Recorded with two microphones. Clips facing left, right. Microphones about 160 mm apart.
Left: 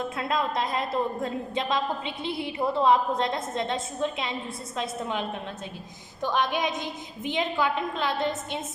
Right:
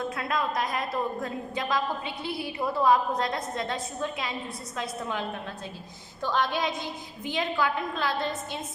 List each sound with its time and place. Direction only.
0.2 s a woman's voice: 25° left (ahead or behind)
6.2 s a woman's voice: 15° left (ahead or behind)